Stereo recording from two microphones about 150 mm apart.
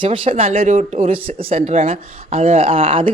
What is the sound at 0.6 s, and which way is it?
Speech, 50° right (ahead or behind).